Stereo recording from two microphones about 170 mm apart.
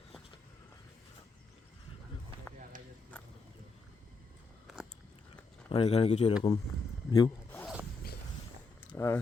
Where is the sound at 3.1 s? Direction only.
10° left (ahead or behind).